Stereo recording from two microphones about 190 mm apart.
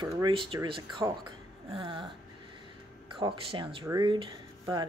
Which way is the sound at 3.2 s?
25° right (ahead or behind).